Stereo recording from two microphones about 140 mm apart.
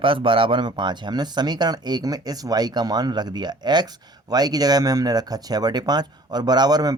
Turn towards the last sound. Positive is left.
turn(degrees=-30)  # may be behind; listen again after turning